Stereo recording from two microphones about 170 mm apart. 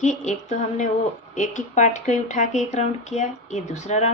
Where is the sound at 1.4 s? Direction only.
45° left (ahead or behind).